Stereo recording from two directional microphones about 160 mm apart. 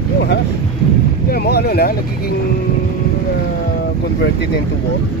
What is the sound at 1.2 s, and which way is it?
Speech, 85° left.